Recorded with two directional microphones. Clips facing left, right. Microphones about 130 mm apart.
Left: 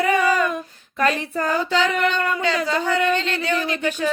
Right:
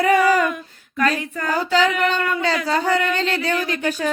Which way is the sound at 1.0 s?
35° left (ahead or behind).